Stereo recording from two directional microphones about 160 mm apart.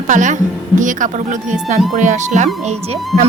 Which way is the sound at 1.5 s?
50° right (ahead or behind).